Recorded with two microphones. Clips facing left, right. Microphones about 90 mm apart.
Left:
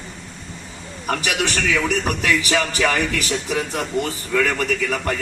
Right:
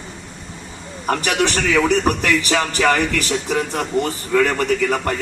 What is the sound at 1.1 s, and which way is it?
A man's voice, 40° right (ahead or behind).